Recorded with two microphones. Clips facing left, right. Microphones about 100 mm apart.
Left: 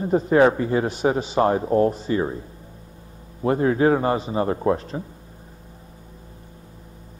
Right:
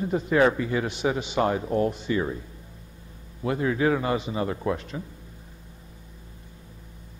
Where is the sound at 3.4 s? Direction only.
40° left (ahead or behind).